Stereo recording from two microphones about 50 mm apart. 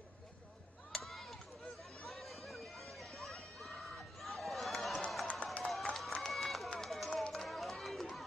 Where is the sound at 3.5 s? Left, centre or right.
Centre.